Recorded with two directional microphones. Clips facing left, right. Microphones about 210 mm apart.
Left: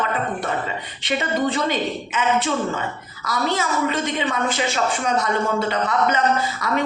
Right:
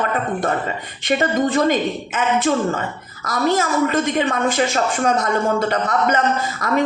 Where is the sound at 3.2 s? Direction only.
45° right (ahead or behind).